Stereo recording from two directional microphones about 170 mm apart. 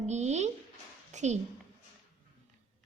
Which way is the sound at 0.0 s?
40° right (ahead or behind).